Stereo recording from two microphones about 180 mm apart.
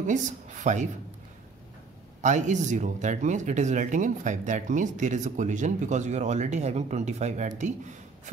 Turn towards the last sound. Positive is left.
turn(degrees=-40)  # may be behind; listen again after turning